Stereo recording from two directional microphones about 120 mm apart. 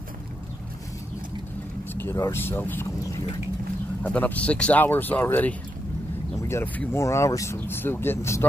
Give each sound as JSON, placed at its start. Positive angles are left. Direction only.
{"t": 2.0, "sound": "speech", "side_deg": 20}
{"t": 4.0, "sound": "speech", "side_deg": 10}